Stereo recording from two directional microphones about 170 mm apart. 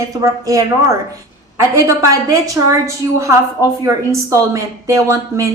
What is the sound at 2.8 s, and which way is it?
A woman's voice, 20° right (ahead or behind).